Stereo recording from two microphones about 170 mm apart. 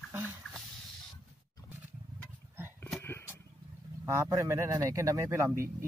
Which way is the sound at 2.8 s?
10° left (ahead or behind).